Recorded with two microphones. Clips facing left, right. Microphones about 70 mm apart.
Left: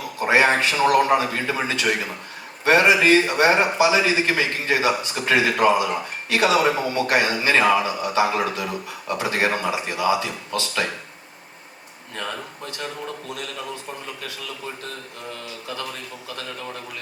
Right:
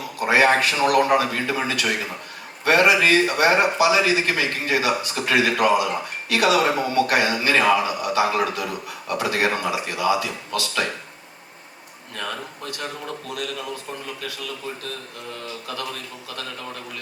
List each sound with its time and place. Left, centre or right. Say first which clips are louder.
0.3 s a man's voice: right 1 dB; left